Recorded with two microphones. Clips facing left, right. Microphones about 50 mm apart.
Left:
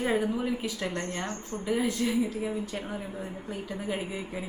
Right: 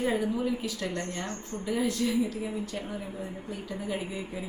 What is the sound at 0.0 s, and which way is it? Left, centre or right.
A woman's voice, centre.